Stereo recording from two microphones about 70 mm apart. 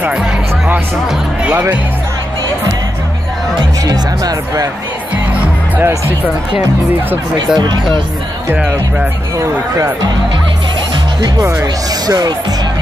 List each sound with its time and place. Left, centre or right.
0.0 s speech: centre
3.5 s speech: right
7.3 s speech: right
11.1 s speech: right